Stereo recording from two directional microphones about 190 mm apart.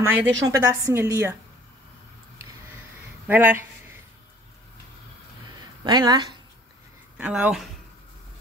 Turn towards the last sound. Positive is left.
turn(degrees=-5)  # may be behind; listen again after turning